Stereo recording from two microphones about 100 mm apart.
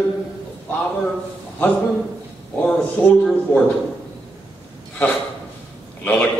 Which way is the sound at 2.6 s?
15° left (ahead or behind).